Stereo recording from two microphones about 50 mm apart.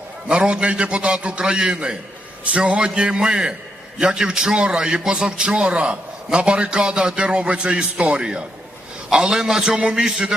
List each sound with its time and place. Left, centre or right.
0.3 s a man's voice: centre